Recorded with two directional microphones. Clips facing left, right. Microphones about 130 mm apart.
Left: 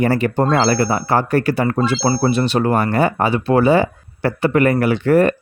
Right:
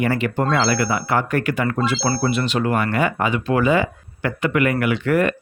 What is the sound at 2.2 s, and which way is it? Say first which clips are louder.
Speech: left 4 dB; 35° left (ahead or behind).